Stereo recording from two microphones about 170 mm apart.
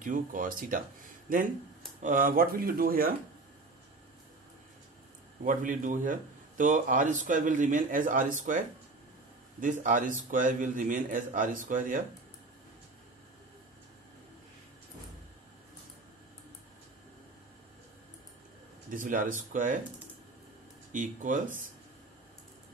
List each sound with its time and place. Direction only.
0.0 s speech: 50° right (ahead or behind)
2.0 s speech: 50° right (ahead or behind)
5.4 s speech: 50° right (ahead or behind)
18.9 s speech: 55° right (ahead or behind)
20.9 s speech: 50° right (ahead or behind)